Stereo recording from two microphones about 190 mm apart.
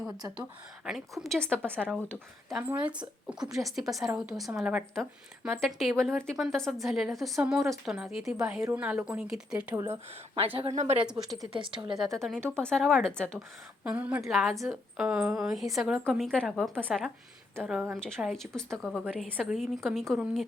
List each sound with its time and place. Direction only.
0.9 s a woman's voice: centre (ahead or behind)
9.7 s speech: 15° right (ahead or behind)
10.3 s speech: 30° right (ahead or behind)
11.0 s a woman's voice: centre (ahead or behind)
11.6 s speech: 25° right (ahead or behind)
12.5 s a woman's voice: 5° left (ahead or behind)
13.8 s a woman's voice: 5° right (ahead or behind)